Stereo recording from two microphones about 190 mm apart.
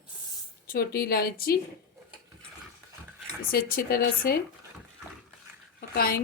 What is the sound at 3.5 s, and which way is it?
Speech, 50° left (ahead or behind).